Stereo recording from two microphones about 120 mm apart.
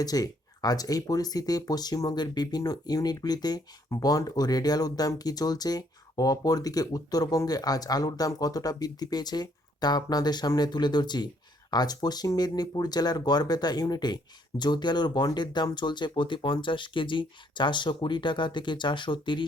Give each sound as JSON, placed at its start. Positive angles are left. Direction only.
{"t": 0.0, "sound": "speech", "side_deg": 30}